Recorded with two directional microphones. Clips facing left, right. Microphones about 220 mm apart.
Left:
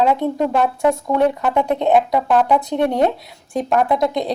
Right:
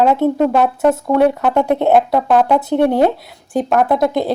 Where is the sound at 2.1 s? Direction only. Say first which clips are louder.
Right 3 dB; 40° right (ahead or behind).